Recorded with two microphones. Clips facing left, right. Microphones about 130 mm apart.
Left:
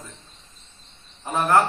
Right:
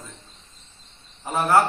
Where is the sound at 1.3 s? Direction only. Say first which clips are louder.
Even; 10° right (ahead or behind).